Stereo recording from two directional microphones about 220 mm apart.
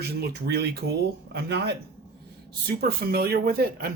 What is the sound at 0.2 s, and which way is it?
Speech, 45° right (ahead or behind).